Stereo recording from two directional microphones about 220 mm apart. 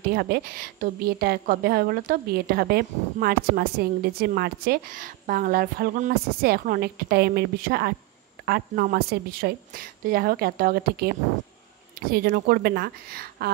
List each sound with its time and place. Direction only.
0.0 s a woman's voice: 45° right (ahead or behind)
12.1 s a woman's voice: 40° right (ahead or behind)